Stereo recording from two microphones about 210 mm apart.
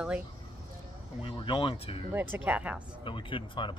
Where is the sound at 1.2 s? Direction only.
25° left (ahead or behind).